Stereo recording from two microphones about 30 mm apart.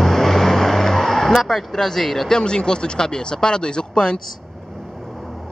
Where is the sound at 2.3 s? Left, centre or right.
Left.